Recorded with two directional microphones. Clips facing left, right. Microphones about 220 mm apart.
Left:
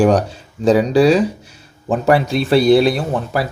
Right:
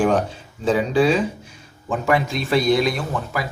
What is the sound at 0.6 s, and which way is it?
Speech, 40° left (ahead or behind).